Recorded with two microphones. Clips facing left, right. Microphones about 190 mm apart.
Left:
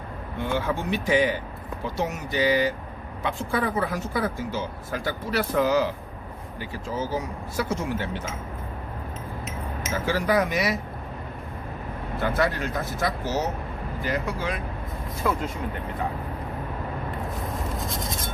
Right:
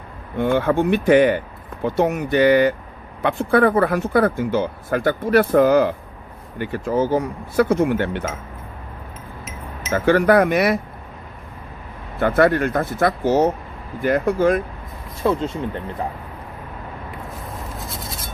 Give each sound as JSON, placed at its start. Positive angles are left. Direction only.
{"t": 0.3, "sound": "speech", "side_deg": -55}
{"t": 9.9, "sound": "speech", "side_deg": -60}
{"t": 12.2, "sound": "speech", "side_deg": -55}
{"t": 15.2, "sound": "speech", "side_deg": -25}